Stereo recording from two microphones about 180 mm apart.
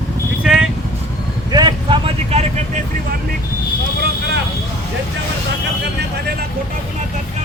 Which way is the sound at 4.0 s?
65° right (ahead or behind).